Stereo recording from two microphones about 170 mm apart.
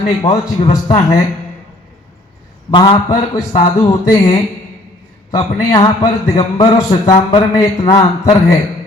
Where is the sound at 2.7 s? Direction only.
25° left (ahead or behind).